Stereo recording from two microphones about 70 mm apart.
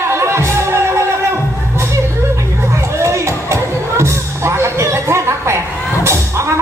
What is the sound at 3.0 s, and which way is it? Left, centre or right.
Music, right.